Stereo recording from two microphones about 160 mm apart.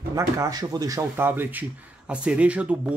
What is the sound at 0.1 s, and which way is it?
Speech, 20° right (ahead or behind).